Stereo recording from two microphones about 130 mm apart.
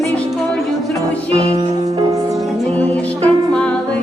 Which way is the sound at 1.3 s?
50° right (ahead or behind).